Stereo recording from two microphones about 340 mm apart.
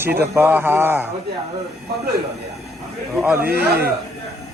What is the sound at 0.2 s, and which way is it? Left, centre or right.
Speech, centre.